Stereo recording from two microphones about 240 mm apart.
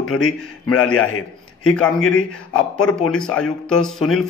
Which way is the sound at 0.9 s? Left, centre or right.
Left.